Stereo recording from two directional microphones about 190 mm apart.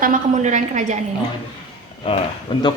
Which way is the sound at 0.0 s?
40° right (ahead or behind).